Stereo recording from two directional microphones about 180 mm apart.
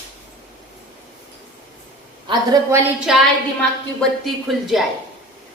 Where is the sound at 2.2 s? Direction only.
20° right (ahead or behind).